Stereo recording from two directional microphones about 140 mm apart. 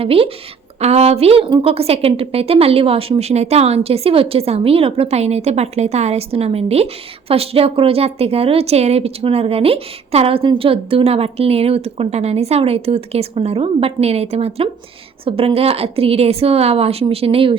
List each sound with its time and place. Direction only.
0.0 s a woman's voice: 40° right (ahead or behind)